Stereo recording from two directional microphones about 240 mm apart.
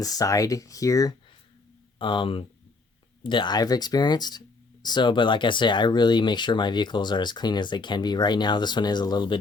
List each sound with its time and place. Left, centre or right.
0.0 s speech: centre